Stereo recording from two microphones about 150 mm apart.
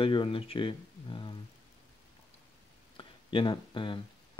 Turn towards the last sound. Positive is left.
turn(degrees=30)  # may be behind; listen again after turning